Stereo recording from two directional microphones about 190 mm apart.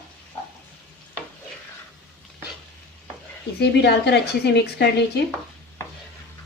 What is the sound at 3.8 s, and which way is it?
A woman's voice, 60° left (ahead or behind).